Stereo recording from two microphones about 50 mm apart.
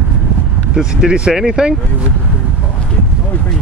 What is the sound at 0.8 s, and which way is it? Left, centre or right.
Speech, centre.